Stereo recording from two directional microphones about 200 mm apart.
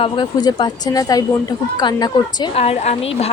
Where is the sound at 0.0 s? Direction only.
20° left (ahead or behind).